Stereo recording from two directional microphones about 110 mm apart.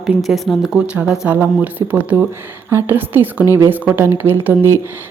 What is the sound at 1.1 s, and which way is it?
Speech, 15° right (ahead or behind).